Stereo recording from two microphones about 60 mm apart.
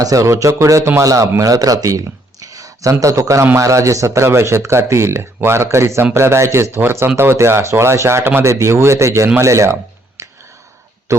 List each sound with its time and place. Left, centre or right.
0.0 s speech: right
0.3 s speech: right
1.4 s speech: right
2.4 s a sound: right
2.9 s speech: right
10.2 s a sound: right